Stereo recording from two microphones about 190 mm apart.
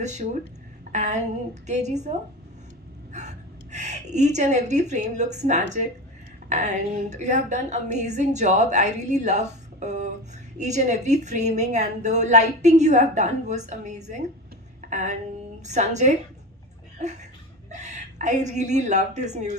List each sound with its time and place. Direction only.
0.0 s a woman's voice: 40° right (ahead or behind)
3.1 s a woman's voice: 40° right (ahead or behind)
14.8 s a sound: 40° right (ahead or behind)
15.6 s a woman's voice: 40° right (ahead or behind)
17.0 s a sound: 40° right (ahead or behind)
17.7 s a woman's voice: 40° right (ahead or behind)